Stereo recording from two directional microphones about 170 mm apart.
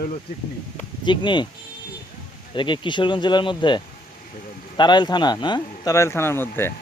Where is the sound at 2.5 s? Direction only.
30° left (ahead or behind).